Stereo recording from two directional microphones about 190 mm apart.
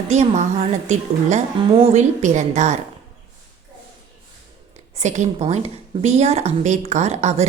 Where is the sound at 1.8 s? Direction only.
35° right (ahead or behind).